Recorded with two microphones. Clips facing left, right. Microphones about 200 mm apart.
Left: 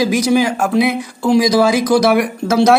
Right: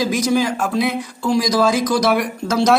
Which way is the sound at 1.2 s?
65° left (ahead or behind).